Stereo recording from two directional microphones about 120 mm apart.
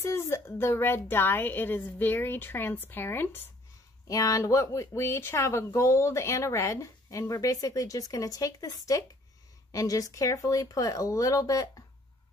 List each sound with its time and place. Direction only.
0.0 s a woman's voice: 20° left (ahead or behind)
4.1 s speech: 30° left (ahead or behind)